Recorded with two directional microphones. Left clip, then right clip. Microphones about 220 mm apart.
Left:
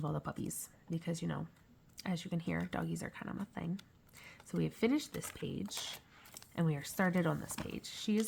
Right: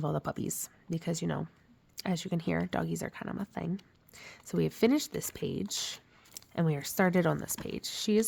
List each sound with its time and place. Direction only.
0.0 s speech: 45° right (ahead or behind)